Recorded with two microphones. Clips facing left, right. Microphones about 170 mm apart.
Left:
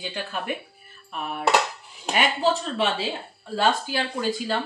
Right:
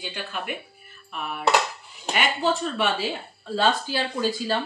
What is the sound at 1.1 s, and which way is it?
Speech, 40° left (ahead or behind).